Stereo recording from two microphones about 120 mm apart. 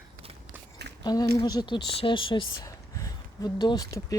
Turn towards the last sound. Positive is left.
turn(degrees=30)  # may be behind; listen again after turning